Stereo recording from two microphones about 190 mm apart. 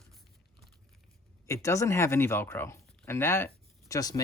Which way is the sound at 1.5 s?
15° left (ahead or behind).